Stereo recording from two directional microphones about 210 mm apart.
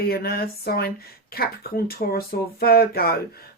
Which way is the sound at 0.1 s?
45° left (ahead or behind).